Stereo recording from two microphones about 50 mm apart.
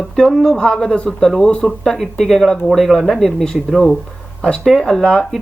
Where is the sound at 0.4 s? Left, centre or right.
Centre.